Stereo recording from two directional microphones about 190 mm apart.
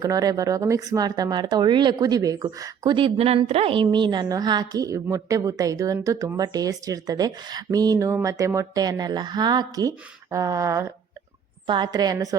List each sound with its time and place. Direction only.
0.0 s speech: 20° right (ahead or behind)